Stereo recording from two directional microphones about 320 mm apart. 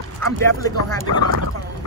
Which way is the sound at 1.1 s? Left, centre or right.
Right.